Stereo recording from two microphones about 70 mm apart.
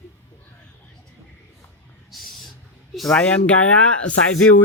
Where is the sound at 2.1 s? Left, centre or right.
Centre.